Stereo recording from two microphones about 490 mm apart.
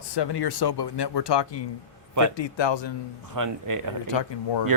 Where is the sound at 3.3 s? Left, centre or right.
Right.